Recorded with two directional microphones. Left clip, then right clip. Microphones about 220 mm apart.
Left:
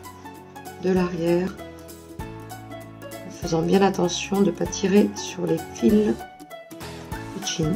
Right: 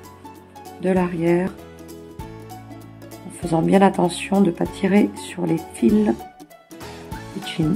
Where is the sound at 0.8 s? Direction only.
35° right (ahead or behind).